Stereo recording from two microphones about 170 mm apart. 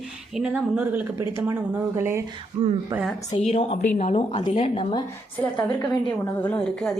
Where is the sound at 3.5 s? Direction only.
35° left (ahead or behind).